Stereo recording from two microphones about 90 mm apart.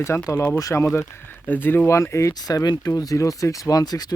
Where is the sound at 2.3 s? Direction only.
45° left (ahead or behind).